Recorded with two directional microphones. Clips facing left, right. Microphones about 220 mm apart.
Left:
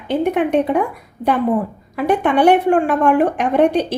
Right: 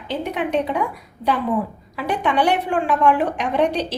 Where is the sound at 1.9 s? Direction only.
55° left (ahead or behind).